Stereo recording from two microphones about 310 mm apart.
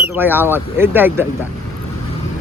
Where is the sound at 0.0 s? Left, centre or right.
Centre.